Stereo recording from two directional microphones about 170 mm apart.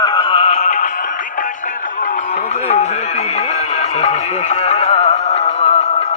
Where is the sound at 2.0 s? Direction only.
50° left (ahead or behind).